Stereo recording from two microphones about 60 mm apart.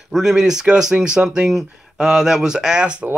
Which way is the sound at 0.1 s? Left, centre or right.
Centre.